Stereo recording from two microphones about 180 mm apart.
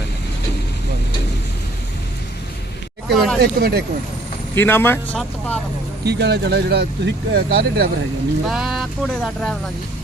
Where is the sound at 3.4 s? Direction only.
60° right (ahead or behind).